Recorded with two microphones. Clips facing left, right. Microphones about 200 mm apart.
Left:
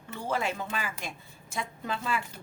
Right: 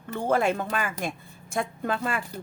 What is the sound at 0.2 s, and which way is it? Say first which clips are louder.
A woman's voice: right 7 dB; 55° right (ahead or behind).